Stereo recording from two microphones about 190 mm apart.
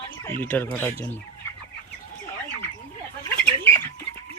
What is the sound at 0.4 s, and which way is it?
Speech, 10° left (ahead or behind).